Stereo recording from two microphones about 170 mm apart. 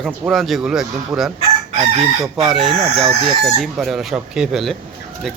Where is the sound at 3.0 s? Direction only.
35° right (ahead or behind).